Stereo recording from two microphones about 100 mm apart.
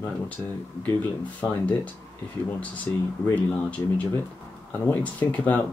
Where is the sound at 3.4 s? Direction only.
15° left (ahead or behind).